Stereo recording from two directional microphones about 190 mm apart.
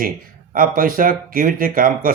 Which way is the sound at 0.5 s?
50° right (ahead or behind).